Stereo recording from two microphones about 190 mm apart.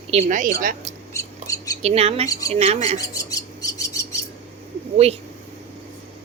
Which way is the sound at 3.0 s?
20° left (ahead or behind).